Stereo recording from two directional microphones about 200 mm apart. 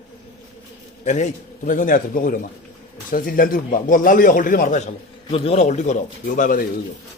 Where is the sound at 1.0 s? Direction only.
35° left (ahead or behind).